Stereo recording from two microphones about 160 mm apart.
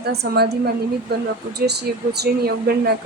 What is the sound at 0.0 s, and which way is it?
Speech, 90° right.